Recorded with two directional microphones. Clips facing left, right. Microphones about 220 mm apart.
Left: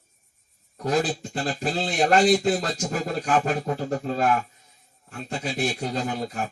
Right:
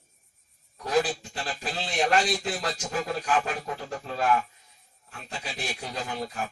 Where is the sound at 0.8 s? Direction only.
45° left (ahead or behind).